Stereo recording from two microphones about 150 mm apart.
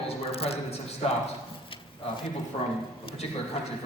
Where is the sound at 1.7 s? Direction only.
35° left (ahead or behind).